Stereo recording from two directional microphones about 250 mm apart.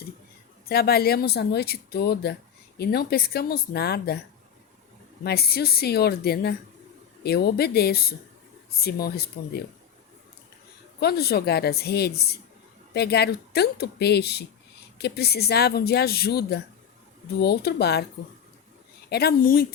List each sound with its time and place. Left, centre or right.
0.6 s speech: left
5.2 s speech: left
11.0 s speech: left
19.1 s speech: left